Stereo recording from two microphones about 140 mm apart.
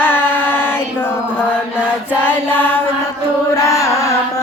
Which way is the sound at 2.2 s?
15° left (ahead or behind).